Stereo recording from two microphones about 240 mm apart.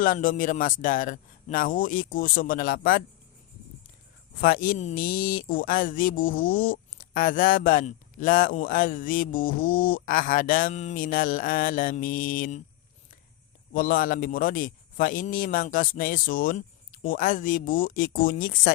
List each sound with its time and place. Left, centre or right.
0.0 s speech: left
4.4 s speech: left
13.7 s speech: left